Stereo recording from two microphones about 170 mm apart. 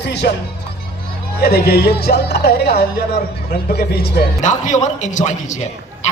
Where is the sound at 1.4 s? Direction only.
70° left (ahead or behind).